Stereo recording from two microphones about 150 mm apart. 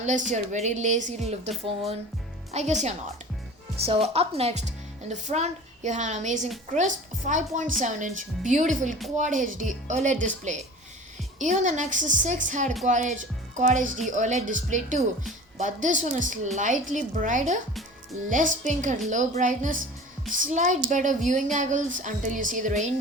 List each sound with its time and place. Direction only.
0.0 s speech: 55° right (ahead or behind)